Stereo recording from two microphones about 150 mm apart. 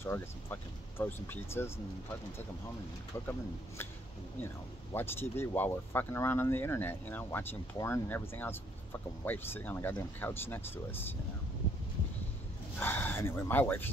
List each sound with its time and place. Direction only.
0.0 s speech: 15° left (ahead or behind)
4.9 s speech: 15° left (ahead or behind)
12.7 s speech: 10° left (ahead or behind)